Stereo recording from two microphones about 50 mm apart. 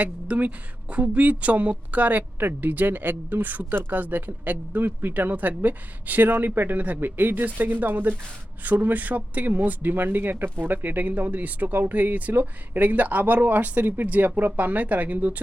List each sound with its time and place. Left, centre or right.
0.0 s speech: right